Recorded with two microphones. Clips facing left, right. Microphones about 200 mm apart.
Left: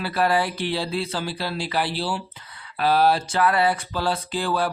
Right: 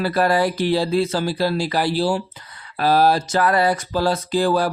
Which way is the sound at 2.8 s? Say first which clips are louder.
Right 3 dB; 40° right (ahead or behind).